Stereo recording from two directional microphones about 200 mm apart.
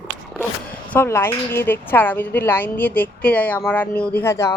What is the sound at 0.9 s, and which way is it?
A woman's voice, 10° left (ahead or behind).